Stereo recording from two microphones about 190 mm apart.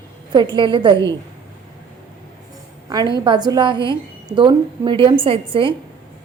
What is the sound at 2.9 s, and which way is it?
A woman's voice, 20° right (ahead or behind).